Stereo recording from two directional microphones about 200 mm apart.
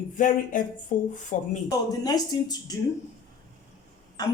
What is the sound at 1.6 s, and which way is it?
A woman's voice, 20° left (ahead or behind).